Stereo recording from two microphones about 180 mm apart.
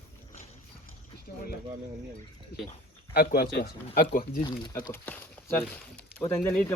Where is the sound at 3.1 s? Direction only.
55° left (ahead or behind).